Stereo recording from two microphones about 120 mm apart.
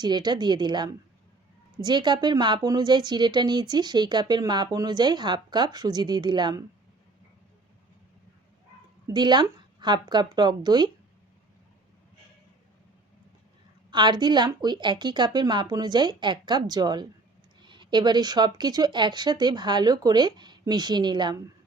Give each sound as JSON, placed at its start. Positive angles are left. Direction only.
{"t": 0.0, "sound": "speech", "side_deg": -35}
{"t": 9.0, "sound": "speech", "side_deg": -35}
{"t": 13.9, "sound": "speech", "side_deg": -40}